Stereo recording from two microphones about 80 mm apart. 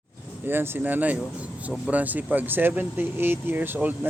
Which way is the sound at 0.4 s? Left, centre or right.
Right.